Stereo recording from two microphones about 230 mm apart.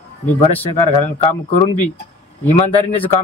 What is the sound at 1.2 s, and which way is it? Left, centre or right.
A man's voice, left.